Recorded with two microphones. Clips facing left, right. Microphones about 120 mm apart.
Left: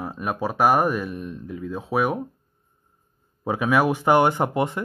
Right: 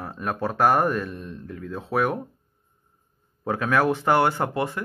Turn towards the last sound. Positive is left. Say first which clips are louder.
# left 3 dB
turn(degrees=20)  # may be behind; listen again after turning